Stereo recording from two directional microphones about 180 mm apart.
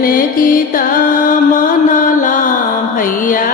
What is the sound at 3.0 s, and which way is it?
Music, 50° left (ahead or behind).